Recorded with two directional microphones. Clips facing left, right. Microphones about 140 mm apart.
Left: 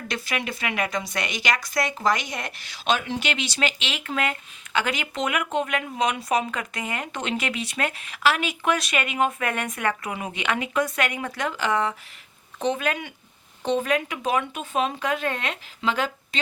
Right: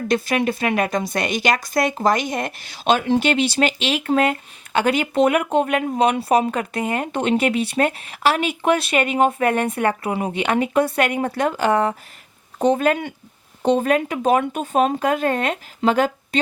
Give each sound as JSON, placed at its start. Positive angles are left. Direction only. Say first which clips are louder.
{"t": 0.1, "sound": "speech", "louder": "right 10 dB", "side_deg": -45}